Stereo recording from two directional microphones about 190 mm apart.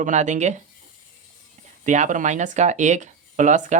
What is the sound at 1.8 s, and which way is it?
Speech, 40° right (ahead or behind).